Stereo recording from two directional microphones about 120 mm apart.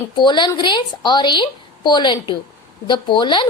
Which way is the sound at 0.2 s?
40° left (ahead or behind).